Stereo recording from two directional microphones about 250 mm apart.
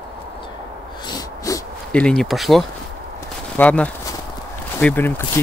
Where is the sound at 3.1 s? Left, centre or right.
Centre.